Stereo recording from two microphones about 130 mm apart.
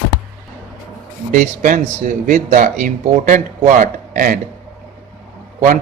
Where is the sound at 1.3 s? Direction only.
90° right.